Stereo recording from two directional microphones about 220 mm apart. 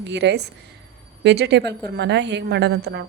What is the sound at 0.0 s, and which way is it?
A woman's voice, 50° right (ahead or behind).